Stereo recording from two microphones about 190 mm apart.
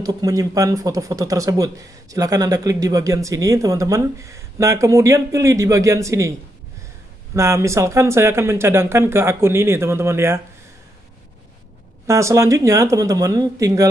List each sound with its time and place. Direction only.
0.0 s a man's voice: 20° right (ahead or behind)
7.3 s a man's voice: 15° right (ahead or behind)
12.1 s a man's voice: 15° right (ahead or behind)